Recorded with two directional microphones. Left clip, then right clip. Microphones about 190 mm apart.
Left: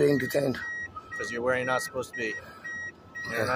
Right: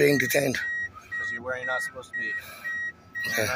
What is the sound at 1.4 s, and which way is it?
Speech, 30° left (ahead or behind).